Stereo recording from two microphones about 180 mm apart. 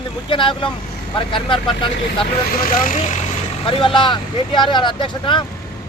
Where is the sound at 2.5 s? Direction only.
50° left (ahead or behind).